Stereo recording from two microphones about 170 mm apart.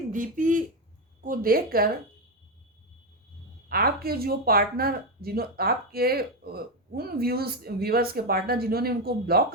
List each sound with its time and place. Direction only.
0.1 s speech: 50° right (ahead or behind)
3.7 s speech: 60° right (ahead or behind)